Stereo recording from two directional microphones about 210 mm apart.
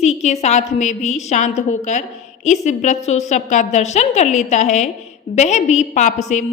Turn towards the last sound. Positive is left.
turn(degrees=35)  # may be behind; listen again after turning